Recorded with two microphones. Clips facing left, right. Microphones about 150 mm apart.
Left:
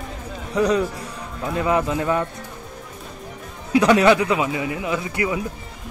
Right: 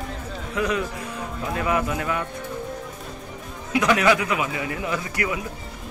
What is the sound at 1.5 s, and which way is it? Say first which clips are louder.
Speech: left 4 dB; 25° left (ahead or behind).